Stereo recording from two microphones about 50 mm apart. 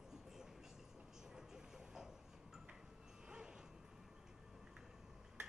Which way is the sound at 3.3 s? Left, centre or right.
Centre.